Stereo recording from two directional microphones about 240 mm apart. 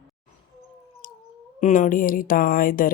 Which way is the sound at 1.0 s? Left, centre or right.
Left.